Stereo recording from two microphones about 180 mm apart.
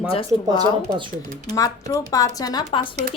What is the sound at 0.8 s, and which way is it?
Speech, 25° right (ahead or behind).